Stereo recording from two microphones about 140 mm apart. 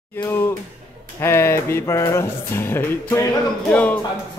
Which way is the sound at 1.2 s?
20° left (ahead or behind).